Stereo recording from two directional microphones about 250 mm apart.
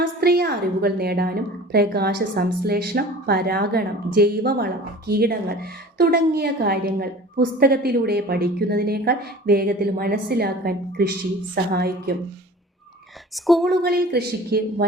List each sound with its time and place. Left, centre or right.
0.0 s a woman's voice: right
13.3 s a woman's voice: centre
13.8 s a woman's voice: right